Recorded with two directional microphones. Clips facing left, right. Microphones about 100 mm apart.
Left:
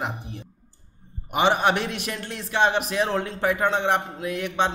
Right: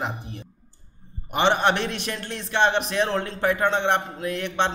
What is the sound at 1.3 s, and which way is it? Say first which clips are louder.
A man's voice: even; 5° left (ahead or behind).